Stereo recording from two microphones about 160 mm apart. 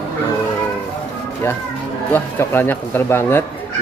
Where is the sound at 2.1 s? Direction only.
15° left (ahead or behind).